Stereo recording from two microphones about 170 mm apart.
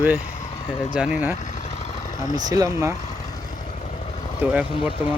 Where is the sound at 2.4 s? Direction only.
20° right (ahead or behind).